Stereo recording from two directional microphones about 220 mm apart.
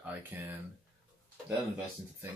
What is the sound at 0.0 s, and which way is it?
Speech, 10° right (ahead or behind).